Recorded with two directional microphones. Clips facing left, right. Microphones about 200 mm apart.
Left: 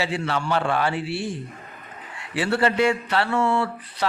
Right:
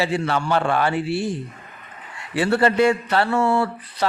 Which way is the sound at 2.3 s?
45° right (ahead or behind).